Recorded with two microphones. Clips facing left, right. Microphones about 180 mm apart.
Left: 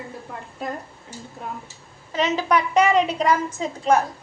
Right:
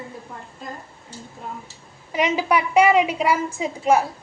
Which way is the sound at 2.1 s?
10° right (ahead or behind).